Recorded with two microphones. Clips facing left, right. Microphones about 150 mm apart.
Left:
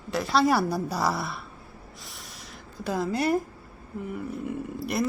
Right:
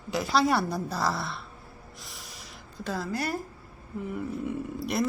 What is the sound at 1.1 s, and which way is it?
Speech, centre (ahead or behind).